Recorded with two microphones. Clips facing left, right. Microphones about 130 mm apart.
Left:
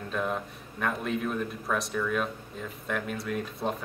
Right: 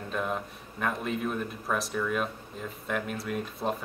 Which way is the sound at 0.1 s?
Centre (ahead or behind).